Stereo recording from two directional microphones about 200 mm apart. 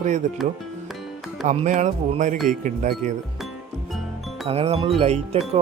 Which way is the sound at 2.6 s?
40° right (ahead or behind).